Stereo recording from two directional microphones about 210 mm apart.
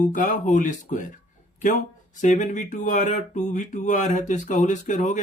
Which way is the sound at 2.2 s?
35° left (ahead or behind).